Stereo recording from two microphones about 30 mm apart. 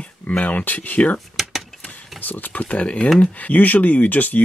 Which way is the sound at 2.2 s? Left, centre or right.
Left.